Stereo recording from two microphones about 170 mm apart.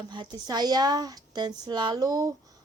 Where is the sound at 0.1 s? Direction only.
25° right (ahead or behind).